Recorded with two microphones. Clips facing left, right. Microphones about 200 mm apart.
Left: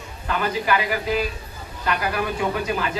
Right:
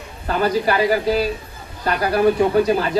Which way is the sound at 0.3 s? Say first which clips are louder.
Right 4 dB; 40° right (ahead or behind).